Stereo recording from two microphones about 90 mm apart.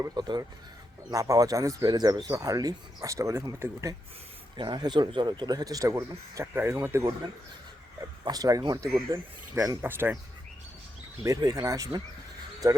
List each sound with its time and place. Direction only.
0.0 s speech: 50° right (ahead or behind)
1.9 s speech: 50° right (ahead or behind); by 3.9 s 35° right (ahead or behind)
4.5 s speech: 55° right (ahead or behind)
6.4 s speech: 25° right (ahead or behind)
8.2 s speech: 45° right (ahead or behind)
9.1 s speech: 35° right (ahead or behind)
9.8 s speech: 25° right (ahead or behind)
11.2 s speech: 40° right (ahead or behind)